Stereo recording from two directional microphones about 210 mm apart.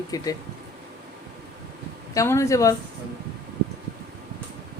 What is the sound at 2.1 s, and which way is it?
Speech, 15° left (ahead or behind).